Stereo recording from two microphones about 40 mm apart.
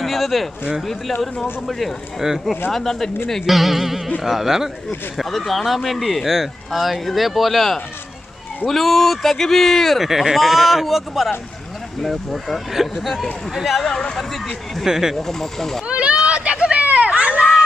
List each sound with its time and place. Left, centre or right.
0.0 s speech: centre
2.2 s speech: centre
2.7 s speech: centre
3.4 s speech: centre
4.8 s speech: centre
10.0 s speech: centre
12.7 s speech: centre
13.8 s speech: centre
14.9 s speech: centre
15.1 s speech: centre
15.9 s a sound: right
16.7 s children playing: right